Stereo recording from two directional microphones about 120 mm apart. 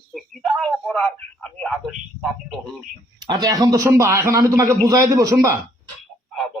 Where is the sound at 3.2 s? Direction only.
35° right (ahead or behind).